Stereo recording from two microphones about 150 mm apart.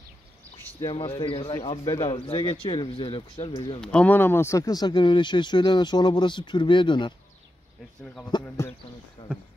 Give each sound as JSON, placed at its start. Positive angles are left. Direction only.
{"t": 0.7, "sound": "speech", "side_deg": 30}
{"t": 3.8, "sound": "speech", "side_deg": 5}
{"t": 8.0, "sound": "speech", "side_deg": 5}